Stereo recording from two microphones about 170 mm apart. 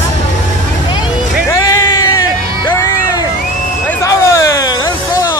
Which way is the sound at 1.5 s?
20° left (ahead or behind).